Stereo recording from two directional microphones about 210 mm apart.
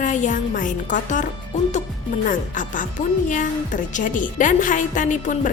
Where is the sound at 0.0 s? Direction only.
35° left (ahead or behind).